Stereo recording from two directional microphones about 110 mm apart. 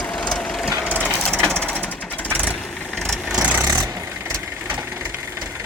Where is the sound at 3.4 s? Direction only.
10° right (ahead or behind).